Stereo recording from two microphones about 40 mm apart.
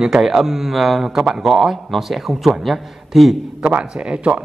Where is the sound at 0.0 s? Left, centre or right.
Centre.